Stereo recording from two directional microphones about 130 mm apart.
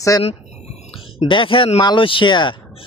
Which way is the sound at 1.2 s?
40° left (ahead or behind).